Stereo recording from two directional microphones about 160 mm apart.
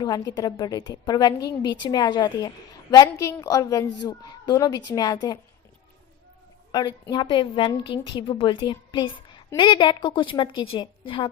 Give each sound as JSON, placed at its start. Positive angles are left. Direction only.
{"t": 0.3, "sound": "a woman's voice", "side_deg": 25}
{"t": 6.7, "sound": "a woman's voice", "side_deg": 25}